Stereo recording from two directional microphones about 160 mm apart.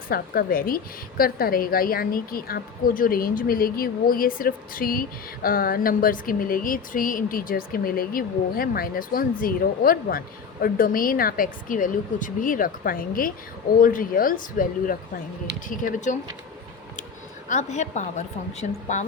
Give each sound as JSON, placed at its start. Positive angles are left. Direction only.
{"t": 0.1, "sound": "a woman's voice", "side_deg": 65}
{"t": 17.5, "sound": "a woman's voice", "side_deg": 45}